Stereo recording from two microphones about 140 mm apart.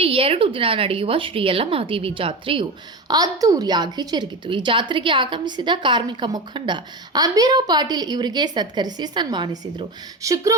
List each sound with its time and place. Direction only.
0.0 s a woman's voice: 45° right (ahead or behind)
3.1 s a woman's voice: 25° right (ahead or behind)
10.2 s speech: 20° right (ahead or behind)